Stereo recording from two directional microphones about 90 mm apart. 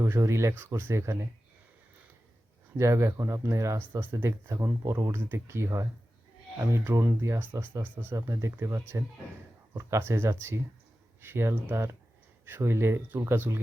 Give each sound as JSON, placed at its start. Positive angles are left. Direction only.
{"t": 0.0, "sound": "speech", "side_deg": -30}
{"t": 2.7, "sound": "speech", "side_deg": -30}
{"t": 8.1, "sound": "speech", "side_deg": -35}